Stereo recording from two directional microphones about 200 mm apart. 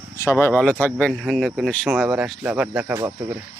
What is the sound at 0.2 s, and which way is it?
Speech, 15° left (ahead or behind).